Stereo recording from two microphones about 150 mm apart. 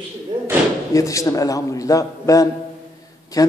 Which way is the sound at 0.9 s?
20° left (ahead or behind).